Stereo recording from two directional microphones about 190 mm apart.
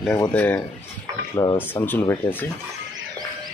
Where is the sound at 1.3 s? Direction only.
25° left (ahead or behind).